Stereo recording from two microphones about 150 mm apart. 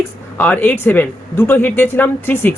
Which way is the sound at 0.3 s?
10° left (ahead or behind).